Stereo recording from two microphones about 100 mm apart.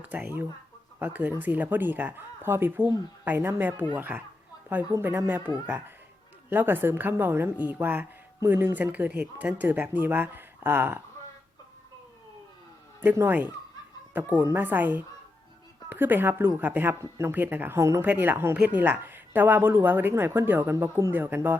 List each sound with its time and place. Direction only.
0.0 s a woman's voice: 20° right (ahead or behind)
13.0 s a woman's voice: 20° right (ahead or behind)
18.0 s a woman's voice: 15° right (ahead or behind)